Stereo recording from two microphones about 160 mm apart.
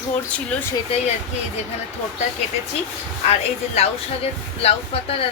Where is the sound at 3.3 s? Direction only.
40° left (ahead or behind).